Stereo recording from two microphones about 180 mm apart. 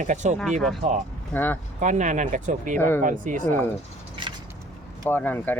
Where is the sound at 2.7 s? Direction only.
10° left (ahead or behind).